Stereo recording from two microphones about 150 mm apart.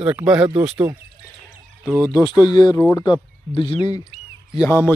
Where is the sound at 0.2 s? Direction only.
20° right (ahead or behind).